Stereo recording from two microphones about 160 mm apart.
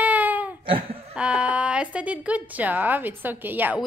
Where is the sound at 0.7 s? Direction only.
35° right (ahead or behind).